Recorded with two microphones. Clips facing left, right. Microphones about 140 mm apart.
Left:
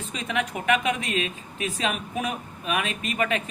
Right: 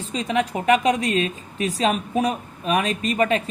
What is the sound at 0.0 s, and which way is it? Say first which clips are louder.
A woman's voice: right 6 dB; 35° right (ahead or behind).